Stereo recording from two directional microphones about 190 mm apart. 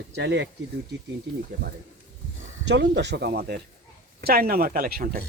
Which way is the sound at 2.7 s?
65° right (ahead or behind).